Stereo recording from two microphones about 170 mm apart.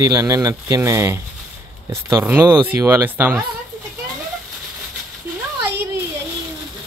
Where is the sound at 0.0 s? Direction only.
20° right (ahead or behind).